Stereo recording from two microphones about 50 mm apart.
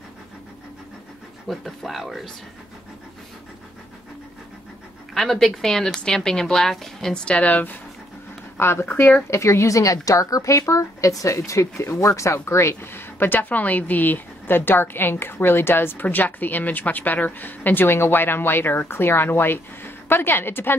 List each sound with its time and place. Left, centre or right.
1.5 s a woman's voice: centre
5.1 s a woman's voice: centre
7.2 s a woman's voice: left
8.5 s a woman's voice: left
9.3 s a woman's voice: left